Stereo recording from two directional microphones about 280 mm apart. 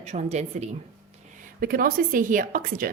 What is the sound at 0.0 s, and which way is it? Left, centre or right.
A woman's voice, right.